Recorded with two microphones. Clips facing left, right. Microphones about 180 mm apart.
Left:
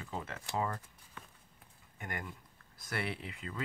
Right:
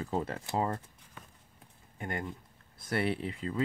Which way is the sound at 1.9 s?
25° right (ahead or behind).